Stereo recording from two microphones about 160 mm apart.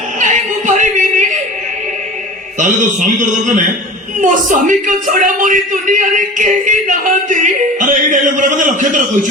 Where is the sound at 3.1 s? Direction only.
50° right (ahead or behind).